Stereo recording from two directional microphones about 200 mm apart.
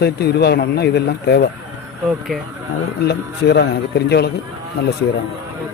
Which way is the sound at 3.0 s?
55° left (ahead or behind).